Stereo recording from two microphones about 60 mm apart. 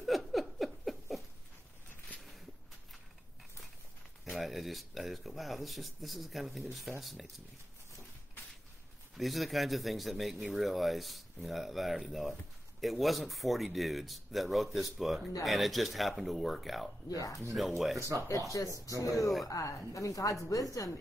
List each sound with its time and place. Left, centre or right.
0.0 s patter: centre
4.3 s speech: centre
9.1 s speech: centre
17.1 s a woman's voice: left
17.6 s speech: centre
17.9 s speech: right
18.7 s speech: right
19.1 s speech: centre
19.4 s a woman's voice: left